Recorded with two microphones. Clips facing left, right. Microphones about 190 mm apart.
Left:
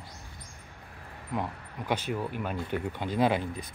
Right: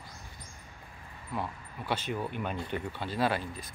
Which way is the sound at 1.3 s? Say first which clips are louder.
Left 3 dB; 15° left (ahead or behind).